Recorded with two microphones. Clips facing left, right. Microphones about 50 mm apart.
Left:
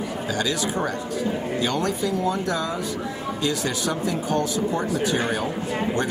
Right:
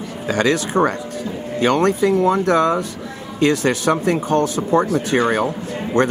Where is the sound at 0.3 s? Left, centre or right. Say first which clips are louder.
Right 9 dB; right.